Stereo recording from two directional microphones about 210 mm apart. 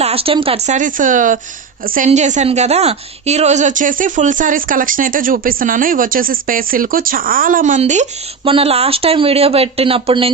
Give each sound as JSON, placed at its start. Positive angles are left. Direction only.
{"t": 0.0, "sound": "a woman's voice", "side_deg": -25}